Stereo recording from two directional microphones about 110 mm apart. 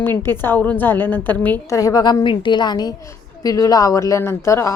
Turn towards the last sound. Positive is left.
turn(degrees=25)  # may be behind; listen again after turning